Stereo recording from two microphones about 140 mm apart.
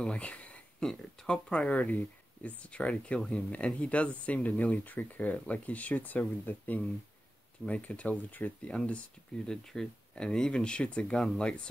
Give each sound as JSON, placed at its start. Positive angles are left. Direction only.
{"t": 0.0, "sound": "speech", "side_deg": 10}